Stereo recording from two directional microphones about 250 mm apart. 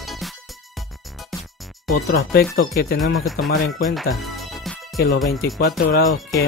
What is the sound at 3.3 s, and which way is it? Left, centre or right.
Speech, left.